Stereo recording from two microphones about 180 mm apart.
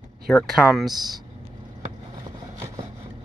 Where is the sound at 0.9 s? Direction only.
20° right (ahead or behind).